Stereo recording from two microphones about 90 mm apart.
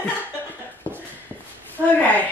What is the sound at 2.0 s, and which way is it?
Speech, 20° left (ahead or behind).